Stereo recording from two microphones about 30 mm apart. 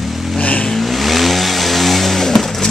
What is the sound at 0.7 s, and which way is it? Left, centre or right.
Vehicle, centre.